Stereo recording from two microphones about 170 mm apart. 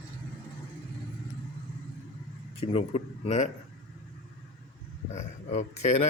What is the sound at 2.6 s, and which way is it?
Speech, 35° left (ahead or behind).